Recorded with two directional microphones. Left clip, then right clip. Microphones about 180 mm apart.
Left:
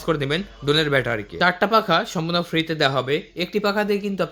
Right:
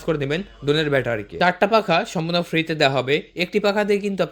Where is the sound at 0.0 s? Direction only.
15° right (ahead or behind).